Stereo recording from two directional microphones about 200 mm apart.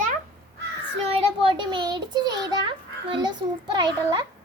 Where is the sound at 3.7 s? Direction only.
20° right (ahead or behind).